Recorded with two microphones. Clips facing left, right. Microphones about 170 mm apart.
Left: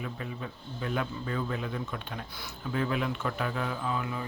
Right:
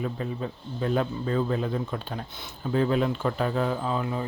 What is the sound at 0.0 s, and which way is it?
Speech, 35° right (ahead or behind).